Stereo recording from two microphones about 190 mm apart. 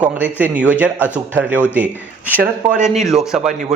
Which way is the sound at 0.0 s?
10° right (ahead or behind).